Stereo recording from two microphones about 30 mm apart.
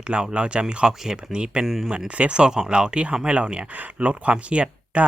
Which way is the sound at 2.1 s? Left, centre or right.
Right.